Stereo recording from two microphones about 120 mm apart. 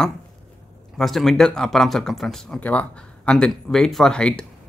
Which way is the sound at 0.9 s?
Centre (ahead or behind).